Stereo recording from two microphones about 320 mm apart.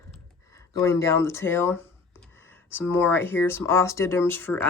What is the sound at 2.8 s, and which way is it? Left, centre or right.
Speech, centre.